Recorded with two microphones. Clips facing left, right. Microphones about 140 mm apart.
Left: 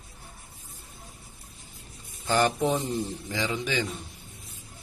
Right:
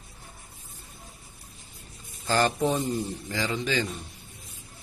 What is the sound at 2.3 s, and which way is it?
Speech, 10° left (ahead or behind).